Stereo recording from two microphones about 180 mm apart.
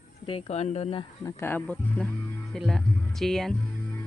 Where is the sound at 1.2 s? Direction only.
10° left (ahead or behind).